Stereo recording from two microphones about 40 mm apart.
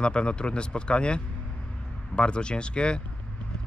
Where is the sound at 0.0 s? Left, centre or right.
Left.